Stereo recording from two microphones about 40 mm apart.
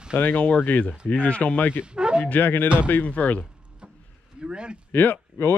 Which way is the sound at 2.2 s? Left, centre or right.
Left.